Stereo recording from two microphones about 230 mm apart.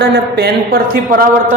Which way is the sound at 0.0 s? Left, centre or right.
Right.